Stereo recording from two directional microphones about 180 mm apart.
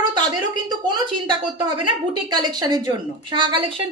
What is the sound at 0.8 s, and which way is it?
Speech, 25° right (ahead or behind).